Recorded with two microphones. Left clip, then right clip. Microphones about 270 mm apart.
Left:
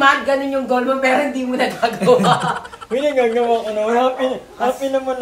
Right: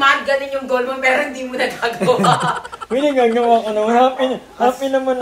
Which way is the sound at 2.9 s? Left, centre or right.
Right.